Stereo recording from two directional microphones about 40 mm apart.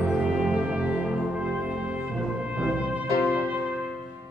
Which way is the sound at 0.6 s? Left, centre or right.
Right.